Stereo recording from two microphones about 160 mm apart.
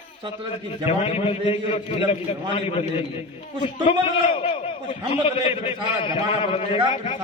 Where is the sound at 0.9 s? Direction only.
40° left (ahead or behind).